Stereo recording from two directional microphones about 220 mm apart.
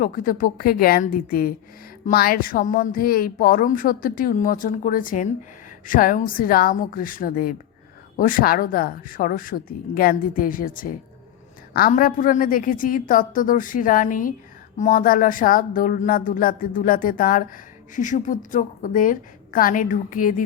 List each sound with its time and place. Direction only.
0.0 s a woman's voice: 40° left (ahead or behind)